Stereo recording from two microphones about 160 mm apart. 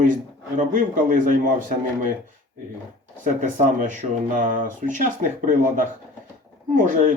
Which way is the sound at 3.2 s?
50° right (ahead or behind).